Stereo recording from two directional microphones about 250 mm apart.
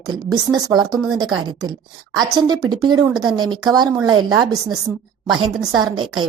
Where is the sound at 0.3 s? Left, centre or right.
Centre.